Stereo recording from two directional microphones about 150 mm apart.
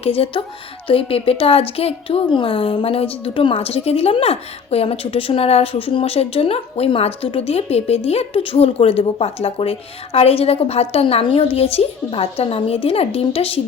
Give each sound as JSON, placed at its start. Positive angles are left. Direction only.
{"t": 0.0, "sound": "speech", "side_deg": 40}